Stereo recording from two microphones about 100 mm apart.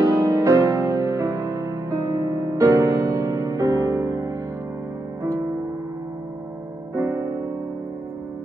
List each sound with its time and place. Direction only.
0.0 s music: 30° right (ahead or behind)
7.0 s keyboard: 30° right (ahead or behind)